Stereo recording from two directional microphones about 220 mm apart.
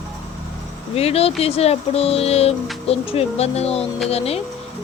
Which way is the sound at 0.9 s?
25° left (ahead or behind).